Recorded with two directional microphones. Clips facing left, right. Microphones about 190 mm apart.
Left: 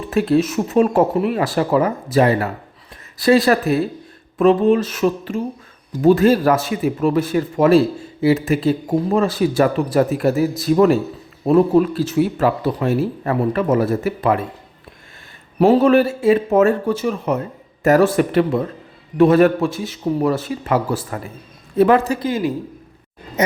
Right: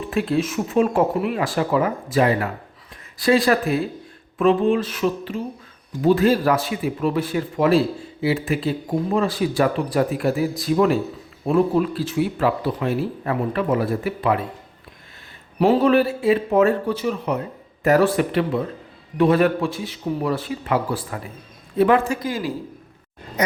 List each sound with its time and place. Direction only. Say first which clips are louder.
0.1 s speech: left 6 dB; 40° left (ahead or behind)
15.6 s speech: left 4 dB; 45° left (ahead or behind)
22.3 s a man's voice: left 5 dB; 20° left (ahead or behind)